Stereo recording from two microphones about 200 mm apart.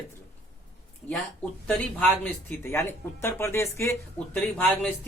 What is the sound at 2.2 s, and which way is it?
Speech, 10° left (ahead or behind).